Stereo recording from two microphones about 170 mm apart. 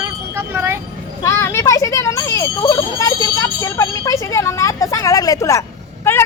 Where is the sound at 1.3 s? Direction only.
15° left (ahead or behind).